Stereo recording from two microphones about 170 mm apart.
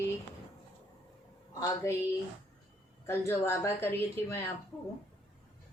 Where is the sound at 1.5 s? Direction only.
20° left (ahead or behind).